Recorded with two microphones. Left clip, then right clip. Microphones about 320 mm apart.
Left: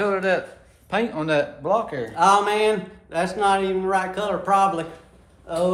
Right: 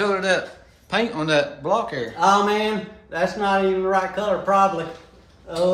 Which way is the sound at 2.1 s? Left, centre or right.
Left.